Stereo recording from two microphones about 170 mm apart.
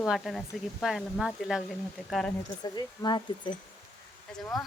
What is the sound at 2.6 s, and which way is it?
Speech, 25° left (ahead or behind).